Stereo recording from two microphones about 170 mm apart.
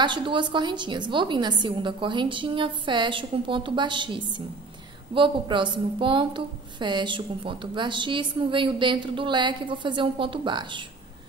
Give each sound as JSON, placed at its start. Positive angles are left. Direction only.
{"t": 0.0, "sound": "a woman's voice", "side_deg": -30}